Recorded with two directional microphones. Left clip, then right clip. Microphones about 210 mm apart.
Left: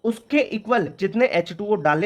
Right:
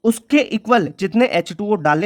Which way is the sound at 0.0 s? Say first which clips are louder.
Right 5 dB; 40° right (ahead or behind).